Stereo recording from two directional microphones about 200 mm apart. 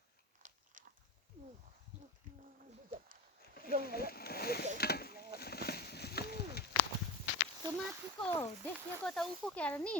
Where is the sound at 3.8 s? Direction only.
50° left (ahead or behind).